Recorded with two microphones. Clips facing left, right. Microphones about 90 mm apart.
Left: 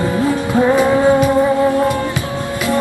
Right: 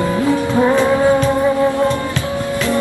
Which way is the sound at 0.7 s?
15° left (ahead or behind).